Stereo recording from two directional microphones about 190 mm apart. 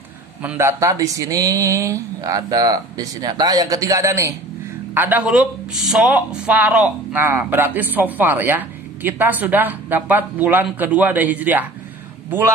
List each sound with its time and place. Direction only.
0.4 s speech: 10° right (ahead or behind)